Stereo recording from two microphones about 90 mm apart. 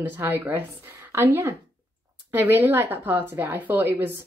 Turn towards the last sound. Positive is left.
turn(degrees=-20)  # may be behind; listen again after turning